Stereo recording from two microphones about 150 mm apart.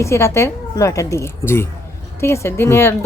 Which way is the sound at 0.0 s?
20° left (ahead or behind).